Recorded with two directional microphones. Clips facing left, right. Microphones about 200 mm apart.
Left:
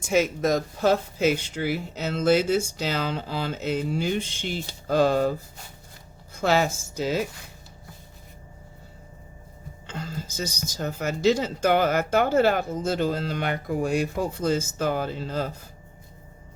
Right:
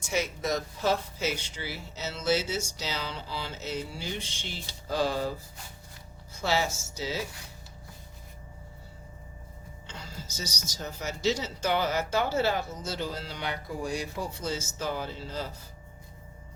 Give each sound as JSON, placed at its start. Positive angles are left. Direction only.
{"t": 0.0, "sound": "speech", "side_deg": 50}
{"t": 6.3, "sound": "speech", "side_deg": 55}
{"t": 9.8, "sound": "speech", "side_deg": 50}